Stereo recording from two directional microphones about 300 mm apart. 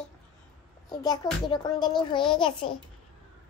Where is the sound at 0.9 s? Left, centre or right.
Centre.